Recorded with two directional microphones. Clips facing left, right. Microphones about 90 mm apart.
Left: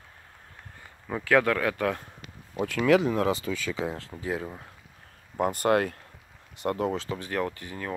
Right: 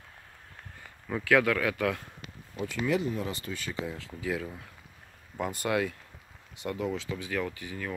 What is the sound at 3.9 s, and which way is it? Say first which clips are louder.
Speech: left 3 dB; 45° left (ahead or behind).